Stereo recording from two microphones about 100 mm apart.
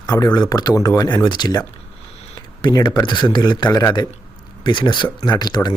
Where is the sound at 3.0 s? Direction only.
50° left (ahead or behind).